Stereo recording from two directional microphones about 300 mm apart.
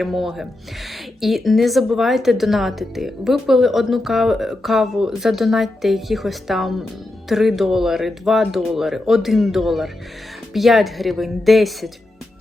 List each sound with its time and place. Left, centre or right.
0.0 s a woman's voice: centre